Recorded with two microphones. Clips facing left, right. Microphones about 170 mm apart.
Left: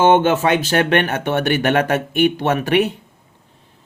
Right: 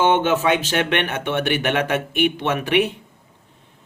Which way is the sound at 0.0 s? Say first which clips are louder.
Left 4 dB; 45° left (ahead or behind).